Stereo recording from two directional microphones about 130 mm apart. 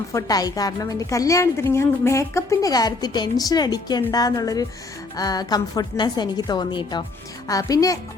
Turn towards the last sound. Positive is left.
turn(degrees=25)  # may be behind; listen again after turning